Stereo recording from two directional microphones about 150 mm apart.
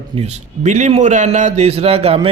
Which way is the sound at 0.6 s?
50° right (ahead or behind).